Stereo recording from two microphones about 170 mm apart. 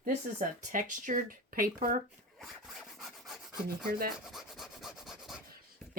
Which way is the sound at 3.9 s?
60° right (ahead or behind).